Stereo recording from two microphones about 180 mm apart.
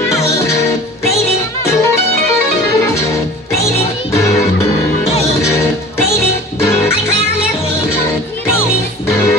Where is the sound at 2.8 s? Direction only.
15° left (ahead or behind).